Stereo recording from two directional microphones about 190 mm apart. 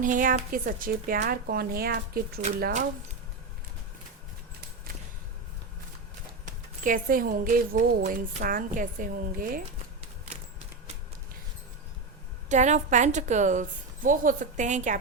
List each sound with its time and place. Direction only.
0.0 s speech: 45° right (ahead or behind)
6.4 s speech: 45° right (ahead or behind)
12.5 s a woman's voice: 40° right (ahead or behind)